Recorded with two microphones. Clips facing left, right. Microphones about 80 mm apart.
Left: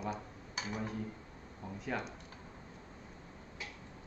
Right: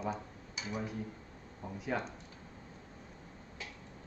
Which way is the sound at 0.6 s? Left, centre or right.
Left.